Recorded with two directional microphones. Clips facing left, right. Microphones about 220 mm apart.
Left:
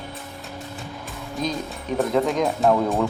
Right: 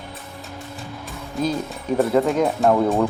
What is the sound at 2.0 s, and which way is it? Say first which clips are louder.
Speech: right 3 dB; 5° right (ahead or behind).